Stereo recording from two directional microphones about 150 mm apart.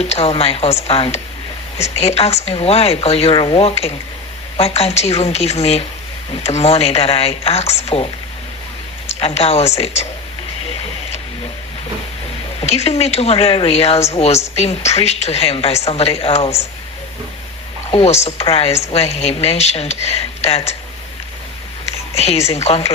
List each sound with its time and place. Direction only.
0.0 s a woman's voice: 45° left (ahead or behind)
9.0 s a woman's voice: 45° left (ahead or behind)
12.5 s a woman's voice: 45° left (ahead or behind)
17.9 s a woman's voice: 45° left (ahead or behind)
22.1 s a woman's voice: 45° left (ahead or behind)